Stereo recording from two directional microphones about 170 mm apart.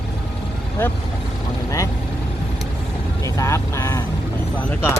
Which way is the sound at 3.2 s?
15° left (ahead or behind).